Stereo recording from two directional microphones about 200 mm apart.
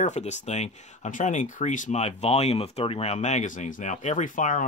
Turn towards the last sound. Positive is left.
turn(degrees=40)  # may be behind; listen again after turning